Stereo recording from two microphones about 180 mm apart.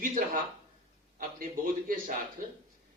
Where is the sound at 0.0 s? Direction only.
50° right (ahead or behind).